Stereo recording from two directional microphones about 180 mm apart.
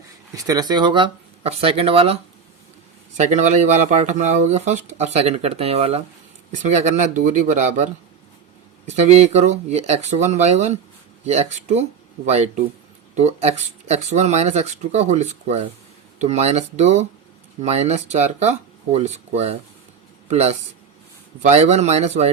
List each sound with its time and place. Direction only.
0.3 s speech: 20° right (ahead or behind)
3.2 s speech: 40° right (ahead or behind)
8.9 s a man's voice: 40° right (ahead or behind)